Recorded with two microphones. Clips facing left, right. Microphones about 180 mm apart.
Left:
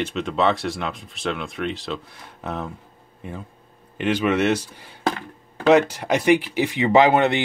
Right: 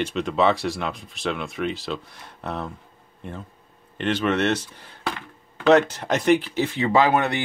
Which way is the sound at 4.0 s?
10° left (ahead or behind).